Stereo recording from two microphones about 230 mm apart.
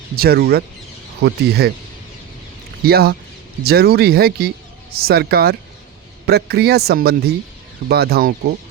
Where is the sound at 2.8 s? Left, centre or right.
Right.